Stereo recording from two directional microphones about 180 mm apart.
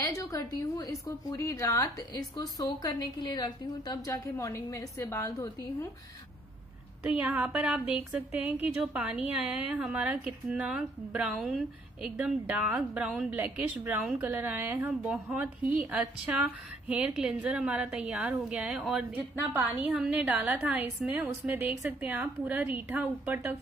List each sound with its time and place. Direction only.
0.0 s a woman's voice: 20° left (ahead or behind)
7.0 s a woman's voice: 5° right (ahead or behind)